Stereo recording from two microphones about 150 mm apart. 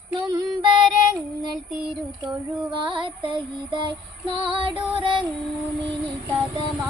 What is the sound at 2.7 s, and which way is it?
Music, 35° right (ahead or behind).